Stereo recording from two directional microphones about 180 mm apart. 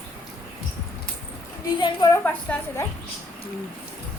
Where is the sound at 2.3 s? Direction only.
10° left (ahead or behind).